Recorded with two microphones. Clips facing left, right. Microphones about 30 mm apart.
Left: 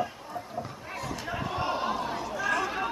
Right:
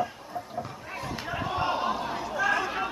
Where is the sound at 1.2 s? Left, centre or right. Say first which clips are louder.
Right 3 dB; centre.